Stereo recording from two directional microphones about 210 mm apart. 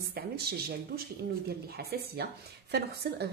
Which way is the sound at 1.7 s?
50° right (ahead or behind).